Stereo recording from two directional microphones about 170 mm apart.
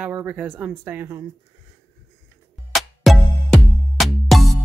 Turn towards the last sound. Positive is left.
turn(degrees=0)  # may be behind; listen again after turning